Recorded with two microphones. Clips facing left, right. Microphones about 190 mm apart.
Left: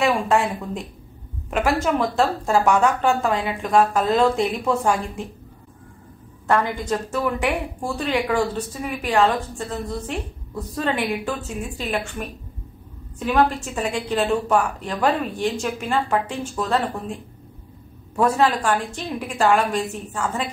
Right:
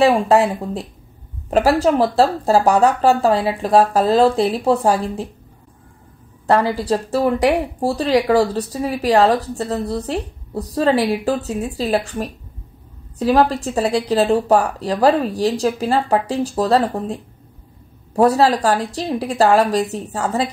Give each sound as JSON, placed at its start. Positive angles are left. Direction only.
{"t": 0.0, "sound": "speech", "side_deg": -35}
{"t": 6.4, "sound": "speech", "side_deg": -35}